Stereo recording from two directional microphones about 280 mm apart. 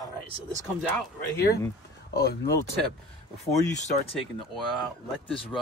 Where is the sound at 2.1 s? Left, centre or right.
Left.